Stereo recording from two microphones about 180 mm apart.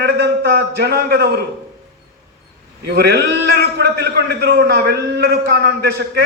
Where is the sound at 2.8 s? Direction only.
65° right (ahead or behind).